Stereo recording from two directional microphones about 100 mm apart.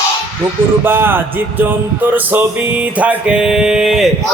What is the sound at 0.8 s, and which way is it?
Music, 20° right (ahead or behind).